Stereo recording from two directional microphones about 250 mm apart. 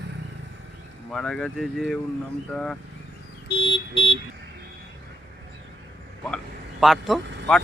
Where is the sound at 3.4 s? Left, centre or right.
Left.